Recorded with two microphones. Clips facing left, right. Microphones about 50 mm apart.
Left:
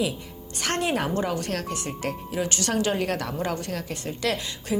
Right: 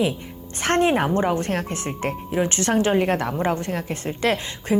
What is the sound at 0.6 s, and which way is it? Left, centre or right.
A woman's voice, right.